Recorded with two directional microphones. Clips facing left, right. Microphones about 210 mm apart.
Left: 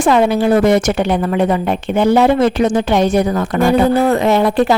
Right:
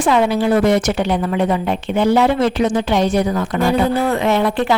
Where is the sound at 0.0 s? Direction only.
50° left (ahead or behind).